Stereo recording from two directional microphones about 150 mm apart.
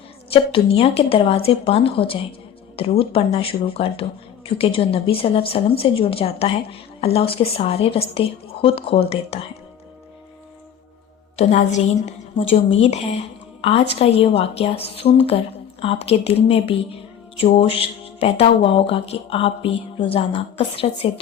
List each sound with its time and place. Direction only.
0.3 s speech: 40° left (ahead or behind)
11.3 s a woman's voice: 50° left (ahead or behind)